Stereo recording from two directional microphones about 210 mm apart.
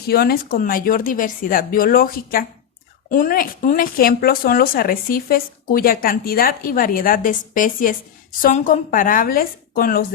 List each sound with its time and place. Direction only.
0.0 s a woman's voice: 50° left (ahead or behind)